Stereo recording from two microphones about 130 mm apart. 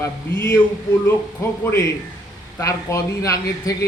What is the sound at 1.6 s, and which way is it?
A man's voice, 20° left (ahead or behind).